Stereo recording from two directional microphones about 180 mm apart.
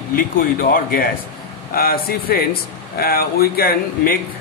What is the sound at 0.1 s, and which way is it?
Speech, 50° left (ahead or behind).